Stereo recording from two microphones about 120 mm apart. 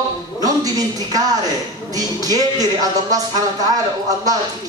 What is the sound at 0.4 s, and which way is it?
A woman's voice, 30° right (ahead or behind).